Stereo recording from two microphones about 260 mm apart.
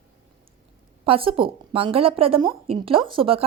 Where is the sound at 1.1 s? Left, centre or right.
Right.